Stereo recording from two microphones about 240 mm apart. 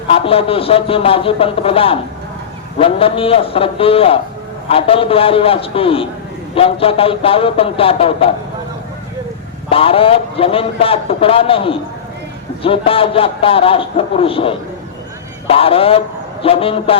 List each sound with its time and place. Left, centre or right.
0.1 s a man's voice: left
9.6 s a man's voice: left